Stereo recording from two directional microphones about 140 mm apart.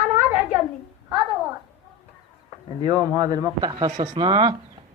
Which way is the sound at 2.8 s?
30° right (ahead or behind).